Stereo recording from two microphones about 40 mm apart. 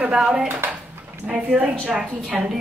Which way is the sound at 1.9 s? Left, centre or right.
Centre.